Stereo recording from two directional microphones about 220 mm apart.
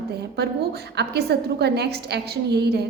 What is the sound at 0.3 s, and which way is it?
A woman's voice, 50° right (ahead or behind).